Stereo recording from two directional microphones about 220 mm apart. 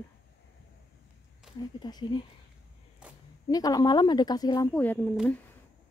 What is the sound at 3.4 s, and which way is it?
Speech, 15° left (ahead or behind).